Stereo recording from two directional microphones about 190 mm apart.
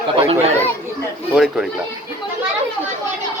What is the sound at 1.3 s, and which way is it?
Speech, 5° right (ahead or behind).